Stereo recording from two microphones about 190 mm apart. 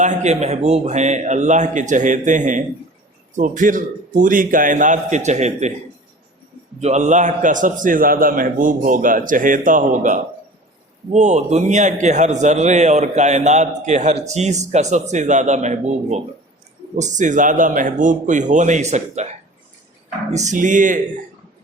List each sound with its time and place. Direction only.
0.0 s a man's voice: 40° right (ahead or behind)
6.7 s a man's voice: 35° right (ahead or behind)
20.3 s a man's voice: 40° right (ahead or behind)